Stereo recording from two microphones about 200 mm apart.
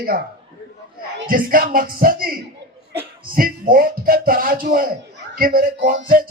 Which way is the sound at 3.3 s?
45° right (ahead or behind).